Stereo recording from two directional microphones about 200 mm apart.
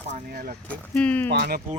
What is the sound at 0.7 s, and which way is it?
Speech, 5° left (ahead or behind).